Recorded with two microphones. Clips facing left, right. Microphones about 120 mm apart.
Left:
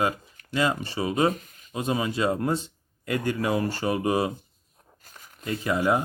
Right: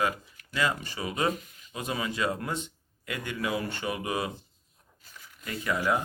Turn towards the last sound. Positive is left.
turn(degrees=25)  # may be behind; listen again after turning